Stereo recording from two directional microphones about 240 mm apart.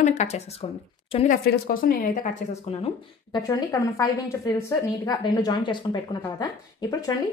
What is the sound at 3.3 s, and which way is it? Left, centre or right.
A woman's voice, centre.